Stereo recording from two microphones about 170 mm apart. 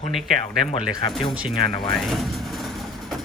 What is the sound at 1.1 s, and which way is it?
Speech, centre (ahead or behind).